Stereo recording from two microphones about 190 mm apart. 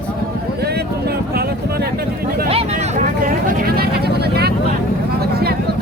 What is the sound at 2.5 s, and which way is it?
Vehicle, 30° right (ahead or behind).